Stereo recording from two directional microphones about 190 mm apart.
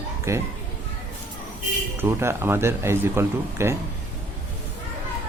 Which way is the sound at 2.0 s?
10° right (ahead or behind).